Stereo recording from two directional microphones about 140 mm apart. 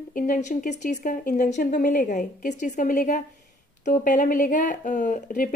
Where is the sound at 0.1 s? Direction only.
65° left (ahead or behind).